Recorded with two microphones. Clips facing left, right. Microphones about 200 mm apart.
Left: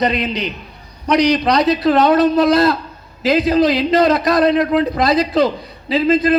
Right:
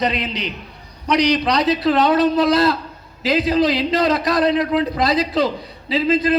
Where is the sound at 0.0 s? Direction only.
50° left (ahead or behind).